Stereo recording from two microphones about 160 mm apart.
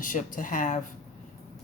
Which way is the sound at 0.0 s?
55° left (ahead or behind).